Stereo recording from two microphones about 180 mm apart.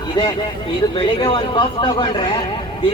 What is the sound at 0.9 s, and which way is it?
Speech, 25° left (ahead or behind).